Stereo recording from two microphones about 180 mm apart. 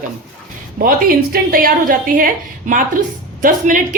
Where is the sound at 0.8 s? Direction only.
55° right (ahead or behind).